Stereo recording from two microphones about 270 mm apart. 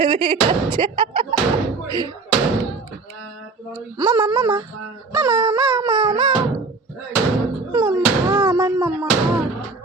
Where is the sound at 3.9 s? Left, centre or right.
Centre.